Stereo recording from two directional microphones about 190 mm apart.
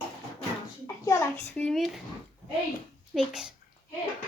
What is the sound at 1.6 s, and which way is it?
Speech, centre (ahead or behind).